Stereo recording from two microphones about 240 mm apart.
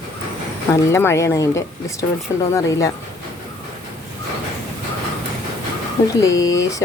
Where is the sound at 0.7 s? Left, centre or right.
Centre.